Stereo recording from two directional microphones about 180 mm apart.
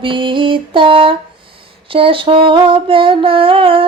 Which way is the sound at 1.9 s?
30° right (ahead or behind).